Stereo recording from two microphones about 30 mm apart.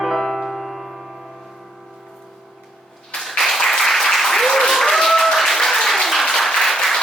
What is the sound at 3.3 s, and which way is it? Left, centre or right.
Applause, centre.